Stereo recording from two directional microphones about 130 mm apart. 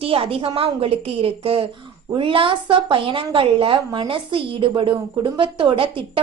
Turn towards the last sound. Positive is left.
turn(degrees=-45)  # may be behind; listen again after turning